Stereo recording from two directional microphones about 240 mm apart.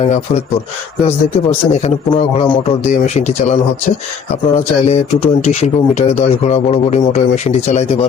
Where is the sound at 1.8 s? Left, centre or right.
Left.